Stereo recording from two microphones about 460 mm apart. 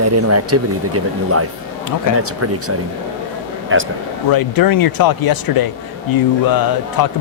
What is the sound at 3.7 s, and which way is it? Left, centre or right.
Speech, right.